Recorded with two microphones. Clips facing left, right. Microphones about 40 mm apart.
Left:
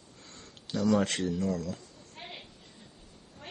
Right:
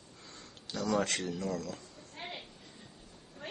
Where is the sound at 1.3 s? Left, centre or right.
Left.